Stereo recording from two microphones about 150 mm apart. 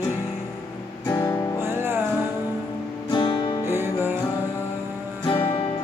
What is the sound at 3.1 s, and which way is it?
Music, 30° left (ahead or behind).